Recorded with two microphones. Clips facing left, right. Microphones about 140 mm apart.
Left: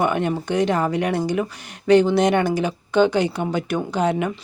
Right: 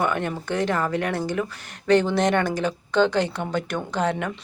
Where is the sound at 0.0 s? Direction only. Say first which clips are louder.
Left 4 dB; 15° left (ahead or behind).